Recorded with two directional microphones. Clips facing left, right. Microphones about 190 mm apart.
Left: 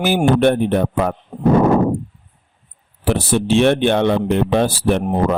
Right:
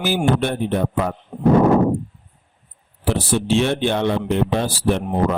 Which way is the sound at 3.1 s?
60° left (ahead or behind).